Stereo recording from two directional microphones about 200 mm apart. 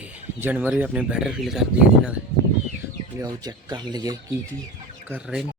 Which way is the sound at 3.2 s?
20° right (ahead or behind).